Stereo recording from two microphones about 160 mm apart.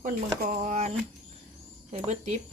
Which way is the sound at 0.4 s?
50° right (ahead or behind).